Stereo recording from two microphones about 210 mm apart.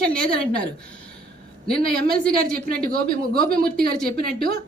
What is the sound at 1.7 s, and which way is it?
A woman's voice, 45° right (ahead or behind).